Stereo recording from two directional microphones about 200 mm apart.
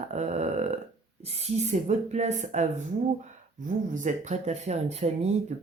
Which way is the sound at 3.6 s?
40° right (ahead or behind).